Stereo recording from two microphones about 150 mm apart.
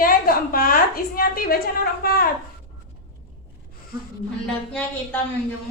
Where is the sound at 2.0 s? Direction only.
90° left.